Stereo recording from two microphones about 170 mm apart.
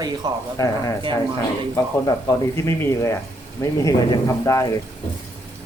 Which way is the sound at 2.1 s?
15° left (ahead or behind).